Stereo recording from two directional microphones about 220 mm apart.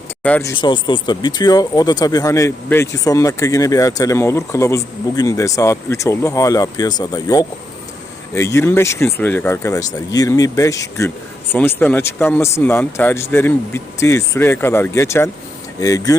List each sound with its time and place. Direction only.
0.2 s speech: 5° left (ahead or behind)
0.6 s speech: 20° left (ahead or behind)